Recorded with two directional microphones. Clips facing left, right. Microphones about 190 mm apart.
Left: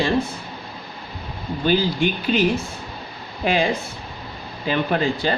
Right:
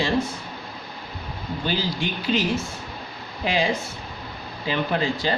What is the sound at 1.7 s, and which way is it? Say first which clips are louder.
Speech: left 8 dB; 55° left (ahead or behind).